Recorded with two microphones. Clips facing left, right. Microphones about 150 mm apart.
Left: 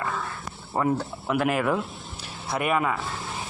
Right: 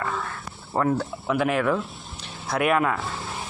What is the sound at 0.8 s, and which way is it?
Speech, 5° left (ahead or behind).